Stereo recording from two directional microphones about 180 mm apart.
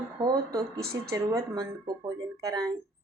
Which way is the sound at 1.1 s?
20° right (ahead or behind).